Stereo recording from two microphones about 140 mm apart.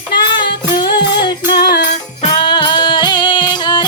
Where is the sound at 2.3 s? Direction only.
35° left (ahead or behind).